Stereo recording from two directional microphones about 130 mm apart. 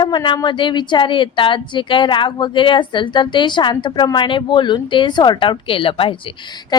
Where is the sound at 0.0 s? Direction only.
40° left (ahead or behind).